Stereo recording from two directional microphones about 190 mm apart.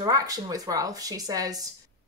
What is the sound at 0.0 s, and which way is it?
A woman's voice, 20° right (ahead or behind).